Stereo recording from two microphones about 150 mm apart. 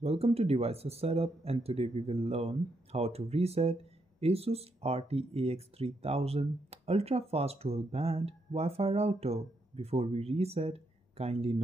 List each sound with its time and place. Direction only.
0.0 s speech: 40° right (ahead or behind)